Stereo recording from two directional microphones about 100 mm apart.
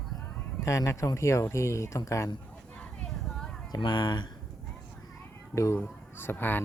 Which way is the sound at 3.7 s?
45° left (ahead or behind).